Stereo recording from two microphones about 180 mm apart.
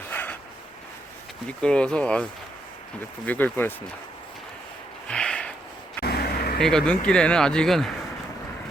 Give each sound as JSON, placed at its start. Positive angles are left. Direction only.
{"t": 0.1, "sound": "a sound", "side_deg": 10}
{"t": 1.5, "sound": "speech", "side_deg": 5}
{"t": 3.2, "sound": "speech", "side_deg": 10}
{"t": 5.0, "sound": "a sound", "side_deg": 5}
{"t": 6.0, "sound": "vehicle", "side_deg": 60}
{"t": 6.6, "sound": "speech", "side_deg": 5}